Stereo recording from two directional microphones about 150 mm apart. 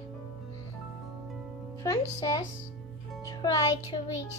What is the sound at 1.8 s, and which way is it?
Speech, 25° left (ahead or behind).